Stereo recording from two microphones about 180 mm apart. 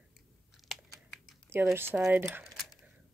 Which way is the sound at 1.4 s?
15° right (ahead or behind).